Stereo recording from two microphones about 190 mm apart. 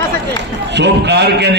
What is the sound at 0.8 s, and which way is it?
Speech, 60° right (ahead or behind).